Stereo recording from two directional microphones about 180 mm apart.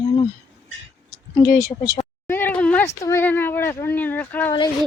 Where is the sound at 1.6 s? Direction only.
20° left (ahead or behind).